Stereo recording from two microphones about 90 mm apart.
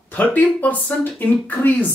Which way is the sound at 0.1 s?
20° left (ahead or behind).